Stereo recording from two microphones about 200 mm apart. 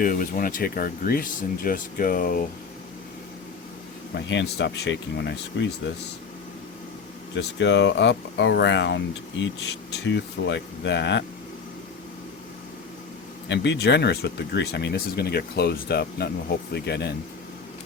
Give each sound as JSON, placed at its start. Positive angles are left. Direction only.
{"t": 0.0, "sound": "speech", "side_deg": 45}
{"t": 4.1, "sound": "speech", "side_deg": 60}
{"t": 7.3, "sound": "speech", "side_deg": 60}
{"t": 13.5, "sound": "speech", "side_deg": 60}